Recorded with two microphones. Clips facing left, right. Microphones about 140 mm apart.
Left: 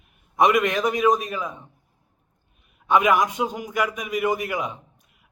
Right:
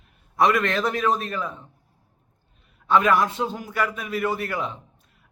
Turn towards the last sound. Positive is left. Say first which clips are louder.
# even
turn(degrees=15)  # may be behind; listen again after turning